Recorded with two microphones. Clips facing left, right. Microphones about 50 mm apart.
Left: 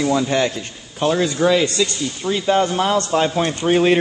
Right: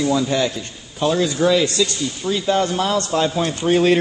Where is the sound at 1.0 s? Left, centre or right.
Left.